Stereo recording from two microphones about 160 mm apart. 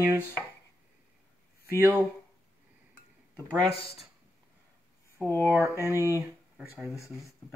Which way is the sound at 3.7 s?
40° left (ahead or behind).